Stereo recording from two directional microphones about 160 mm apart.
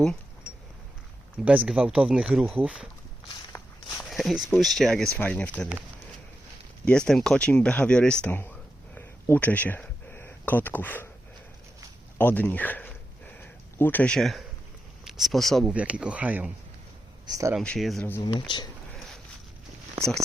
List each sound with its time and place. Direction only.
1.5 s speech: 5° right (ahead or behind)
4.1 s speech: centre (ahead or behind)
6.8 s speech: 5° left (ahead or behind)
9.0 s a sound: 10° left (ahead or behind)
12.1 s a sound: 10° left (ahead or behind)
15.0 s speech: centre (ahead or behind)
17.2 s speech: 20° right (ahead or behind)
17.6 s speech: 5° left (ahead or behind)
18.2 s speech: 30° left (ahead or behind)
18.9 s a sound: centre (ahead or behind)